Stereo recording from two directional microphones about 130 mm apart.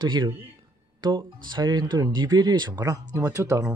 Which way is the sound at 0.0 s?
35° right (ahead or behind).